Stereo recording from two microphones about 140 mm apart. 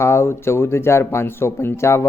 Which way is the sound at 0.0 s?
20° left (ahead or behind).